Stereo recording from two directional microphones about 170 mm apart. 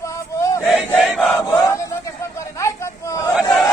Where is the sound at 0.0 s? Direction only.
20° left (ahead or behind).